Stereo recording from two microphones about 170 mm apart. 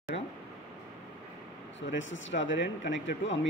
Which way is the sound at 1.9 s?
90° left.